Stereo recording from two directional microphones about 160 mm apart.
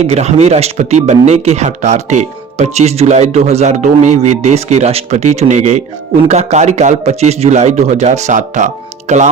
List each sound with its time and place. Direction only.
0.0 s speech: 40° right (ahead or behind)